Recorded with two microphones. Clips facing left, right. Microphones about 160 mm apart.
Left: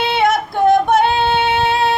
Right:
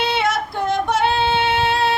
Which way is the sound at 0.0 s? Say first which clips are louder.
Left 4 dB; 55° left (ahead or behind).